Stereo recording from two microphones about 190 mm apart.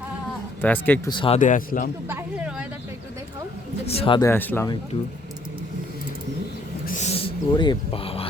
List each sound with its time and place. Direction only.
0.6 s speech: 10° left (ahead or behind)
1.1 s speech: 25° left (ahead or behind)
1.4 s a man's voice: 45° left (ahead or behind)
2.0 s a sound: 10° right (ahead or behind)
3.8 s speech: 30° left (ahead or behind)
4.2 s speech: 10° left (ahead or behind)
6.8 s a sound: 40° left (ahead or behind)